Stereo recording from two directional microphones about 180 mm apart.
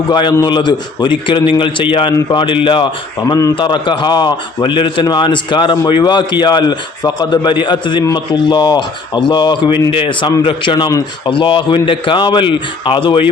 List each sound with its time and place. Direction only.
0.1 s a man's voice: 25° left (ahead or behind)